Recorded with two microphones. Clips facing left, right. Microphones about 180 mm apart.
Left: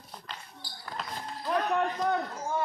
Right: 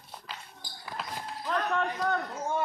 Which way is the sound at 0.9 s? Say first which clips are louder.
Even; 10° right (ahead or behind).